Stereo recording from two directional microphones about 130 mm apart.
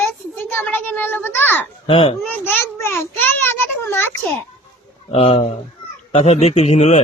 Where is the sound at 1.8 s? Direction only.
45° left (ahead or behind).